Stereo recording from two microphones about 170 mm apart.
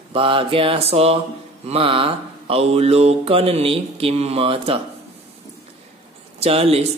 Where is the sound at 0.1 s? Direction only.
35° right (ahead or behind).